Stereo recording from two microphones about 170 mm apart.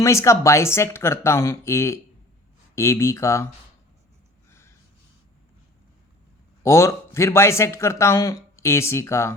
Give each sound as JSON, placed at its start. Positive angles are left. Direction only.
{"t": 0.0, "sound": "speech", "side_deg": 15}
{"t": 6.6, "sound": "speech", "side_deg": 15}